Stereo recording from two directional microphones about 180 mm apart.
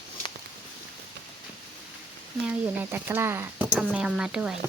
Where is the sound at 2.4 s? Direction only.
10° right (ahead or behind).